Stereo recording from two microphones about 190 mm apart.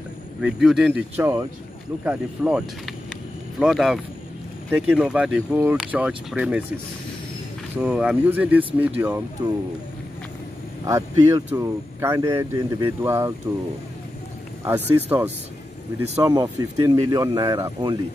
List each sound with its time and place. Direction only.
0.4 s speech: 5° right (ahead or behind)
3.1 s vehicle: 5° right (ahead or behind)
4.6 s speech: 10° right (ahead or behind)
7.7 s speech: 5° right (ahead or behind)
10.9 s speech: 15° right (ahead or behind)
15.0 s speech: 10° right (ahead or behind)